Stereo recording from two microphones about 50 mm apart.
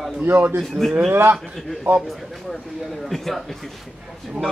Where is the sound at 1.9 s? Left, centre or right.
Right.